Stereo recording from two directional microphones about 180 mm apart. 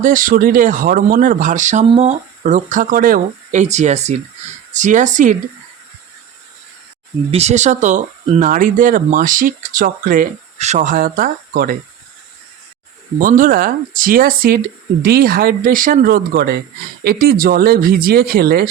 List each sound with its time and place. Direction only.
0.0 s speech: 50° right (ahead or behind)
7.3 s speech: 35° right (ahead or behind); by 11.8 s 50° right (ahead or behind)
13.1 s speech: 50° right (ahead or behind)